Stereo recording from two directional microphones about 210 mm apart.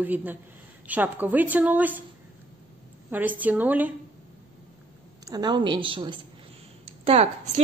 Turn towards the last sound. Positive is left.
turn(degrees=-30)  # may be behind; listen again after turning